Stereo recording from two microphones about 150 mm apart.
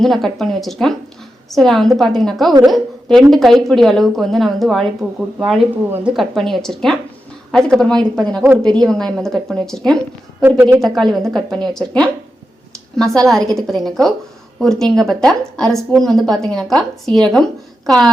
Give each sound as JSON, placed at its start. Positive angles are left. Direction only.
{"t": 0.0, "sound": "a woman's voice", "side_deg": 0}
{"t": 10.4, "sound": "a woman's voice", "side_deg": -15}
{"t": 10.8, "sound": "a woman's voice", "side_deg": 0}